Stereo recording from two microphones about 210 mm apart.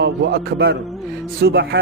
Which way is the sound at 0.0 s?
50° right (ahead or behind).